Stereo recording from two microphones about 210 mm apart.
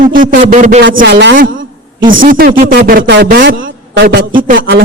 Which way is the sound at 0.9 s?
50° right (ahead or behind).